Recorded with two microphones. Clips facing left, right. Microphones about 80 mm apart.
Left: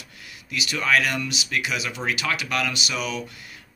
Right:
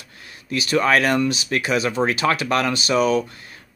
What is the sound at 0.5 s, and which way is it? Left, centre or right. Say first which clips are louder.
Speech: right 5 dB; right.